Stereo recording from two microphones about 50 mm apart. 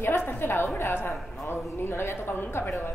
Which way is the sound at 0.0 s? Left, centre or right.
Left.